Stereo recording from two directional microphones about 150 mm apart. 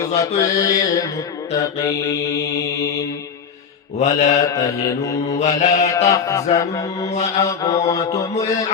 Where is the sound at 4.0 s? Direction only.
45° left (ahead or behind).